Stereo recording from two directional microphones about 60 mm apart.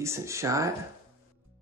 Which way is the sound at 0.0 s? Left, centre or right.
Right.